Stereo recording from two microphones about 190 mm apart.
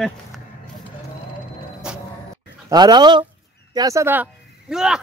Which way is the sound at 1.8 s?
5° right (ahead or behind).